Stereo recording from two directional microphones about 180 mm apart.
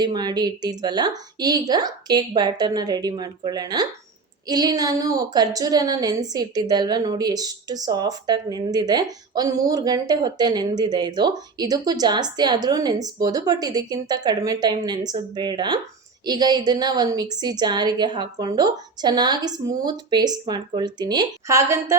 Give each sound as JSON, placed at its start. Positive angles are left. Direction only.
{"t": 0.0, "sound": "a woman's voice", "side_deg": -25}